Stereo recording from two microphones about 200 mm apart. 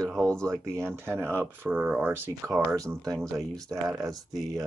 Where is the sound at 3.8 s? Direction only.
15° right (ahead or behind).